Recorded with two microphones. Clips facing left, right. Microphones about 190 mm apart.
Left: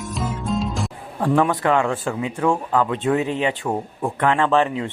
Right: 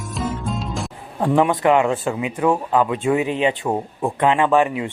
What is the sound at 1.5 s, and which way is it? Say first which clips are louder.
Speech: right 3 dB; 20° right (ahead or behind).